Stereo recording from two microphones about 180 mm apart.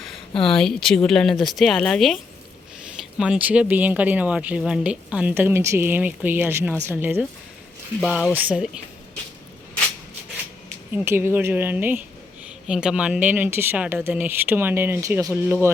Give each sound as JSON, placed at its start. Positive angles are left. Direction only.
{"t": 0.4, "sound": "speech", "side_deg": 5}
{"t": 8.3, "sound": "speech", "side_deg": -10}
{"t": 10.9, "sound": "speech", "side_deg": -15}